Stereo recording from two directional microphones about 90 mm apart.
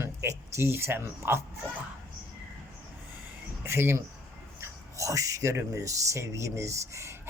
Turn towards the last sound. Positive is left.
turn(degrees=-30)  # may be behind; listen again after turning